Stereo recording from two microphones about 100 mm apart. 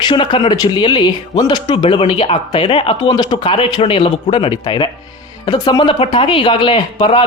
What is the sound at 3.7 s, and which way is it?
Speech, 75° left (ahead or behind).